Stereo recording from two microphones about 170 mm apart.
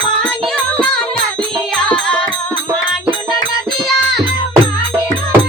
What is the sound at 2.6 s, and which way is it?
Music, 30° right (ahead or behind).